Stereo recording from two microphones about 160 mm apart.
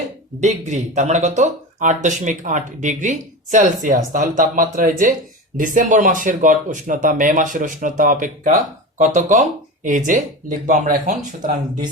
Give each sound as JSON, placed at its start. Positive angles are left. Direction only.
{"t": 0.3, "sound": "speech", "side_deg": -45}